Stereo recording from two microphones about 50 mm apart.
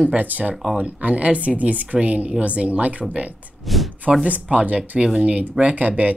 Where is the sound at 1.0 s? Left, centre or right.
Right.